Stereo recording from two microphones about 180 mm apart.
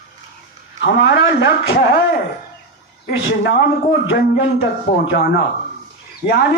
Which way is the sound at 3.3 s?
70° left (ahead or behind).